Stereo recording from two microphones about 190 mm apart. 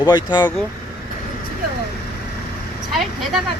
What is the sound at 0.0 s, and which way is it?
Speech, 20° left (ahead or behind).